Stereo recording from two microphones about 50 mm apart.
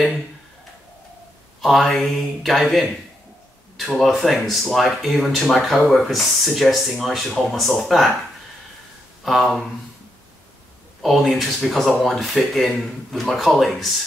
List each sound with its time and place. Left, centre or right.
1.6 s speech: centre
4.0 s speech: centre
9.2 s speech: centre
11.0 s speech: centre